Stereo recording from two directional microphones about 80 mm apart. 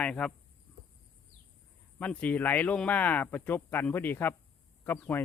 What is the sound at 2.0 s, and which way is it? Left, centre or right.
Speech, centre.